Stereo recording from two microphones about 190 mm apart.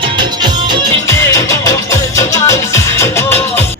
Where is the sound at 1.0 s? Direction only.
15° left (ahead or behind).